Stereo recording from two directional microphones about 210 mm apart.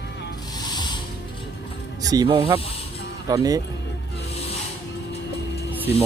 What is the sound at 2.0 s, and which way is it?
Speech, 15° right (ahead or behind).